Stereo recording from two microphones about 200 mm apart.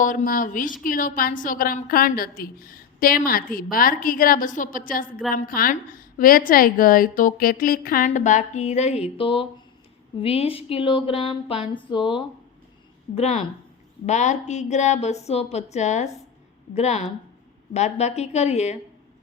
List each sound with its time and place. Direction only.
0.0 s a woman's voice: 40° left (ahead or behind)